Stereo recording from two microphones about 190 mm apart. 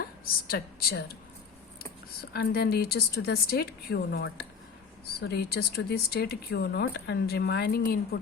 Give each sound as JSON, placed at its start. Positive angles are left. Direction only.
{"t": 0.0, "sound": "a woman's voice", "side_deg": 50}
{"t": 2.3, "sound": "speech", "side_deg": 55}